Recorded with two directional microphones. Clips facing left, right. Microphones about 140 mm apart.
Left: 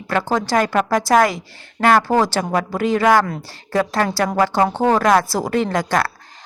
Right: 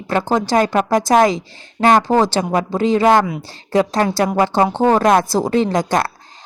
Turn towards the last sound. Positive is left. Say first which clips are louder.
# right 2 dB
turn(degrees=-20)  # may be behind; listen again after turning